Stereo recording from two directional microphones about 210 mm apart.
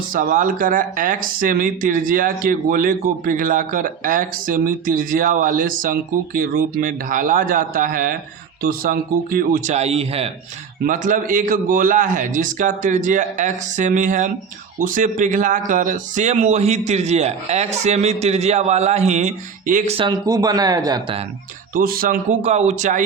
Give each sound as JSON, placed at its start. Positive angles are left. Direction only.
{"t": 0.1, "sound": "speech", "side_deg": -40}
{"t": 10.8, "sound": "speech", "side_deg": -40}
{"t": 21.8, "sound": "speech", "side_deg": -45}